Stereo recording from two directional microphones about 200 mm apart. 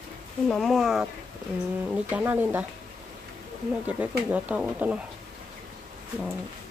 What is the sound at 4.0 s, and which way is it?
Speech, 5° right (ahead or behind).